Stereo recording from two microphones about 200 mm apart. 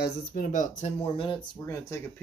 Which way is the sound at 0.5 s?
40° left (ahead or behind).